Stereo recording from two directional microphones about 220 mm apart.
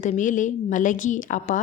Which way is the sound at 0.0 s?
35° left (ahead or behind).